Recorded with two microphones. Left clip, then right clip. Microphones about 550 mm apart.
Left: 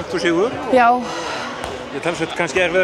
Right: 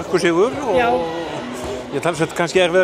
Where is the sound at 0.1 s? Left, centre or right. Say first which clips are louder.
Right 2 dB; right.